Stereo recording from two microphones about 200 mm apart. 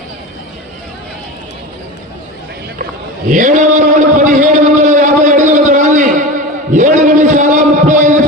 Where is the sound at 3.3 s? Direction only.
40° right (ahead or behind).